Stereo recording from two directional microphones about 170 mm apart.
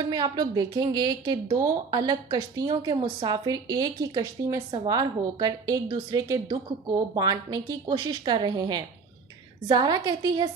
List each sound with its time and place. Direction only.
0.1 s a woman's voice: 25° right (ahead or behind)